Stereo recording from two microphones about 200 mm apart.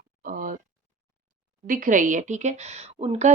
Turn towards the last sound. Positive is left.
turn(degrees=-35)  # may be behind; listen again after turning